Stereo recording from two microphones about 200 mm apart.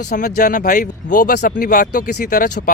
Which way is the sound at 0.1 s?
40° left (ahead or behind).